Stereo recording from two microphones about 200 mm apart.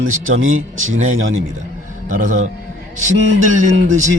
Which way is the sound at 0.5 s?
80° right.